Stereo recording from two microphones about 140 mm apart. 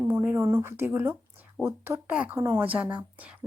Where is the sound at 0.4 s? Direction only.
20° right (ahead or behind).